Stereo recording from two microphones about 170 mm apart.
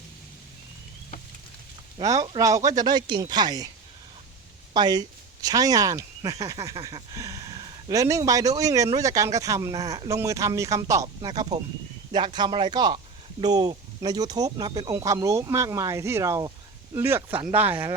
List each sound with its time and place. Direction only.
2.0 s speech: 25° right (ahead or behind)
4.7 s speech: 25° right (ahead or behind)